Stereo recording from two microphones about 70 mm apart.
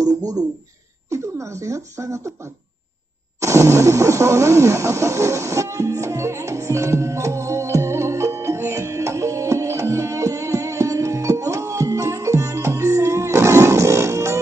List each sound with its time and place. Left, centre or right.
0.2 s speech: right
1.1 s speech: right
3.3 s a sound: right